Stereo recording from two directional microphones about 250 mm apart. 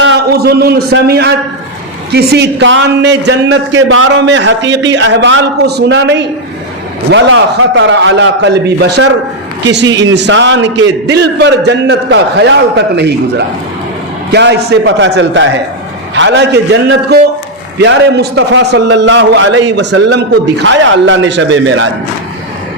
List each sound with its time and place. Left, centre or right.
0.0 s a man's voice: right